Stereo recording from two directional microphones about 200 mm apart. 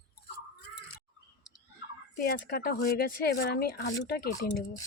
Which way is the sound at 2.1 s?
50° left (ahead or behind).